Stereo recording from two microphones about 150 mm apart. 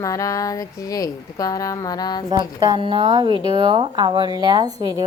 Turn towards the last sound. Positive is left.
turn(degrees=-25)  # may be behind; listen again after turning